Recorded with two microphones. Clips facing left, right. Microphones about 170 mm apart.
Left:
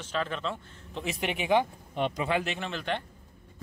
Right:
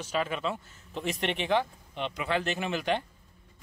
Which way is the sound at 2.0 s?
45° left (ahead or behind).